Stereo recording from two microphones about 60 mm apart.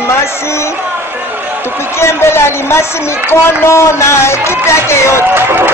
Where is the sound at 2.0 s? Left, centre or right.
Left.